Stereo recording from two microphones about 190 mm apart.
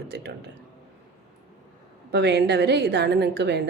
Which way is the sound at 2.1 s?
60° right (ahead or behind).